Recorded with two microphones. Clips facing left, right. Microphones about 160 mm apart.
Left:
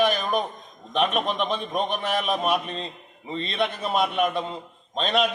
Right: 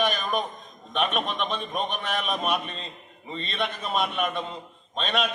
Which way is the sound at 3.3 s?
20° left (ahead or behind).